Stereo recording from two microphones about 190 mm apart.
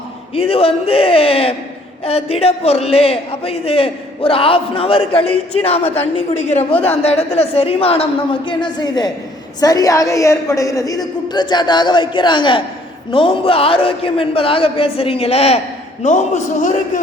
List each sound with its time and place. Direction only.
0.3 s a man's voice: 30° left (ahead or behind)